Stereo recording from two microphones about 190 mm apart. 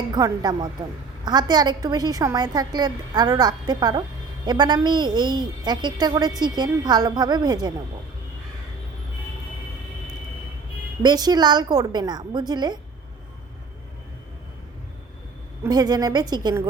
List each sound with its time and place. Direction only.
0.1 s a woman's voice: 20° right (ahead or behind)
11.0 s a woman's voice: 20° right (ahead or behind)
15.6 s a woman's voice: 20° right (ahead or behind)